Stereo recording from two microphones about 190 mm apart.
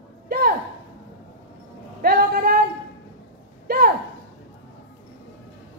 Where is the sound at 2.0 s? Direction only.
50° right (ahead or behind).